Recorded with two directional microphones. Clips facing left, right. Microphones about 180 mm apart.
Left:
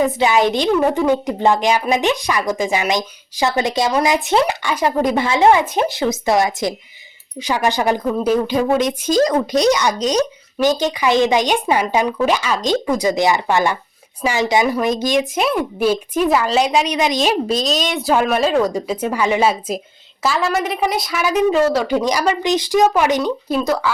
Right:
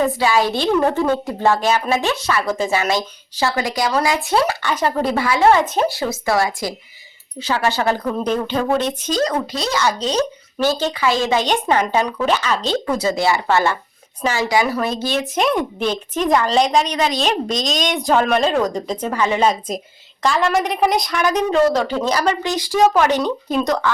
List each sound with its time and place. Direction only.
0.0 s a woman's voice: 20° left (ahead or behind)